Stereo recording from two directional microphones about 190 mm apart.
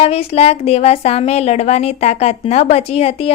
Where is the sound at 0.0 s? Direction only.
30° left (ahead or behind).